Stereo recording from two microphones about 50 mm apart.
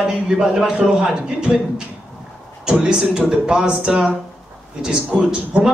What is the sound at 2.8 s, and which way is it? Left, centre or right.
A man's voice, centre.